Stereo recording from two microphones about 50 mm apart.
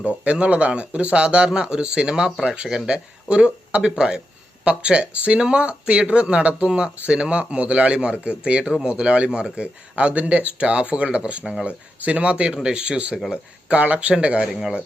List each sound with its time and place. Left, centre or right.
0.0 s speech: right
14.4 s speech: centre